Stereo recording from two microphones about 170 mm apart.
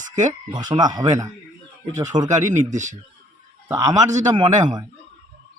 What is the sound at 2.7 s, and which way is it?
Speech, 45° right (ahead or behind).